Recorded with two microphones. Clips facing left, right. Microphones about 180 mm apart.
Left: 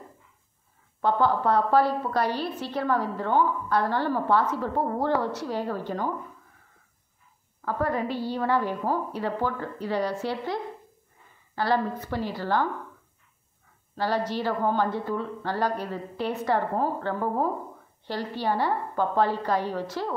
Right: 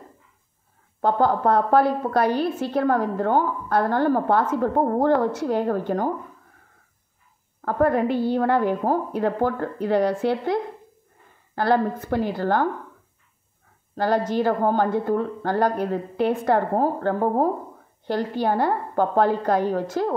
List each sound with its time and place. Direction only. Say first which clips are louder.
1.0 s a woman's voice: right 3 dB; 45° right (ahead or behind)
7.6 s a woman's voice: right 7 dB; 55° right (ahead or behind)
13.9 s a woman's voice: right 6 dB; 50° right (ahead or behind)